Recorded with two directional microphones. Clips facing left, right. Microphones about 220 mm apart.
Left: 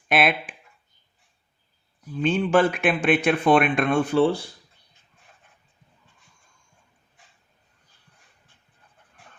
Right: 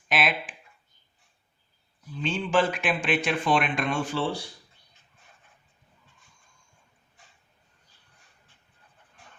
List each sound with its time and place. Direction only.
0.1 s speech: 55° left (ahead or behind)
2.2 s speech: 55° left (ahead or behind)